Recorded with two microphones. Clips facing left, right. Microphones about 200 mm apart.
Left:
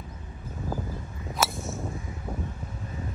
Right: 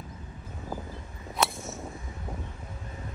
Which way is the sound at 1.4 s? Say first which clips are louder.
Even; 5° left (ahead or behind).